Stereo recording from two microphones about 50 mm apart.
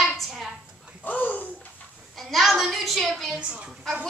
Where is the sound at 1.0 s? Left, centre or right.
Left.